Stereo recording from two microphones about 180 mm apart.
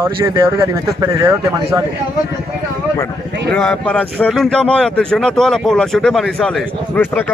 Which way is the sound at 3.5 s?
5° left (ahead or behind).